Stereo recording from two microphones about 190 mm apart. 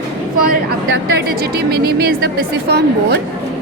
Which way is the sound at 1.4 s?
55° right (ahead or behind).